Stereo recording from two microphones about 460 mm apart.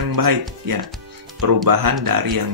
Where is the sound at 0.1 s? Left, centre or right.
Right.